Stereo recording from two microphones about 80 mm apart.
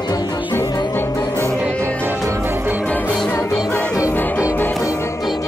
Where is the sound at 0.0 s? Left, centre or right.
Left.